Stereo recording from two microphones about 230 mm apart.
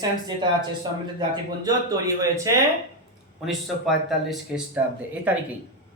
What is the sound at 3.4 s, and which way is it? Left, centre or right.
Speech, centre.